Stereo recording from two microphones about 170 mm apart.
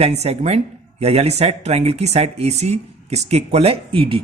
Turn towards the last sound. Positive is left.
turn(degrees=-35)  # may be behind; listen again after turning